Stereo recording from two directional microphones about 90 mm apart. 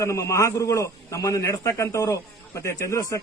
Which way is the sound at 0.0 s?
35° left (ahead or behind).